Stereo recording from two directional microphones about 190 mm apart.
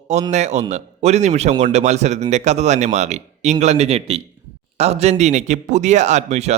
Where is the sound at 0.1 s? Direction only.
35° right (ahead or behind).